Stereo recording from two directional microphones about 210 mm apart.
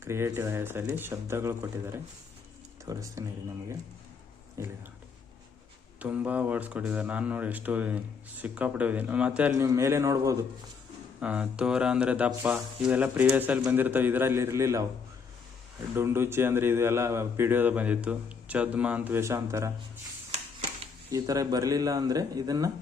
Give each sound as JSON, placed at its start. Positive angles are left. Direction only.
{"t": 0.0, "sound": "speech", "side_deg": -10}
{"t": 4.6, "sound": "speech", "side_deg": -15}
{"t": 6.0, "sound": "speech", "side_deg": -5}
{"t": 16.0, "sound": "speech", "side_deg": -10}
{"t": 21.1, "sound": "speech", "side_deg": -15}